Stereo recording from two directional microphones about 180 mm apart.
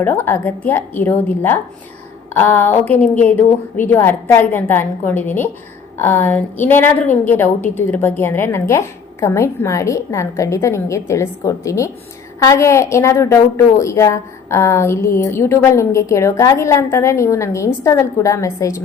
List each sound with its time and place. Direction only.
0.0 s a woman's voice: 10° left (ahead or behind)